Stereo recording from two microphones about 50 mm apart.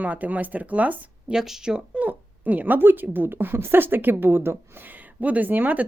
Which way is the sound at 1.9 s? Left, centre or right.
Right.